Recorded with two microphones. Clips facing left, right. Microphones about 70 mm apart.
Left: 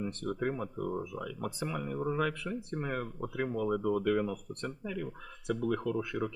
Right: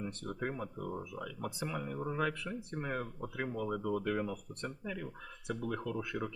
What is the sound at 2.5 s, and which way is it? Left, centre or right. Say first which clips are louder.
Speech: left 4 dB; centre.